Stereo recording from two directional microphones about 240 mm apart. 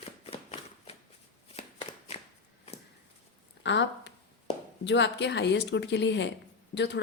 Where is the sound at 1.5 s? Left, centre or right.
Left.